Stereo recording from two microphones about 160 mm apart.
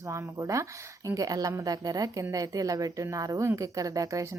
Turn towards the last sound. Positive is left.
turn(degrees=-20)  # may be behind; listen again after turning